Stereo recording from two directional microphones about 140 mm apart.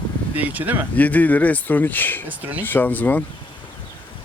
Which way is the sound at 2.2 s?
10° right (ahead or behind).